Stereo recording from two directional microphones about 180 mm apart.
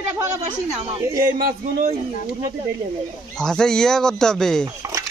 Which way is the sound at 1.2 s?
55° right (ahead or behind).